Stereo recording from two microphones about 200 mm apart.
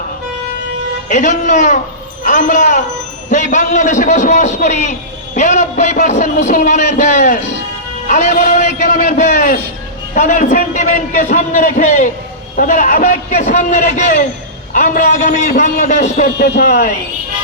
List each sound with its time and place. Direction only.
1.1 s a man's voice: 35° left (ahead or behind)